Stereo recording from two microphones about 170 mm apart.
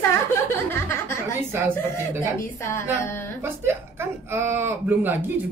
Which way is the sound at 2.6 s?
15° left (ahead or behind).